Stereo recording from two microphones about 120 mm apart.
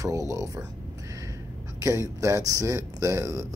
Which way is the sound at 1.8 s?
25° right (ahead or behind).